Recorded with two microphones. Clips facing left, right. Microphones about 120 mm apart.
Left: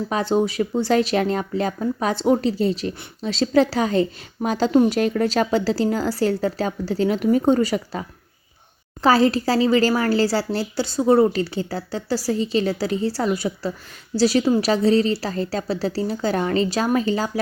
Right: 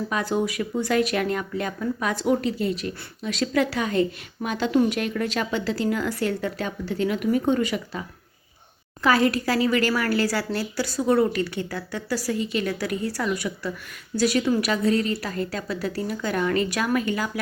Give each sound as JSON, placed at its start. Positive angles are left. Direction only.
{"t": 0.1, "sound": "a woman's voice", "side_deg": 30}